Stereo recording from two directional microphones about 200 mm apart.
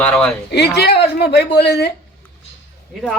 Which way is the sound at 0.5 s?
55° left (ahead or behind).